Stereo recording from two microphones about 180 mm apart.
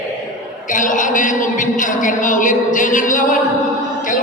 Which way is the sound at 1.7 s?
45° left (ahead or behind).